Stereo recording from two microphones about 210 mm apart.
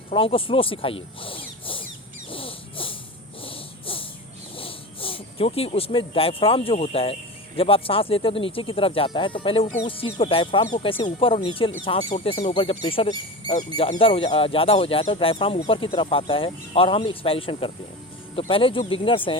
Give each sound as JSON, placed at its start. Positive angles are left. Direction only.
{"t": 0.1, "sound": "speech", "side_deg": 25}
{"t": 2.3, "sound": "a sound", "side_deg": 25}
{"t": 4.5, "sound": "speech", "side_deg": 25}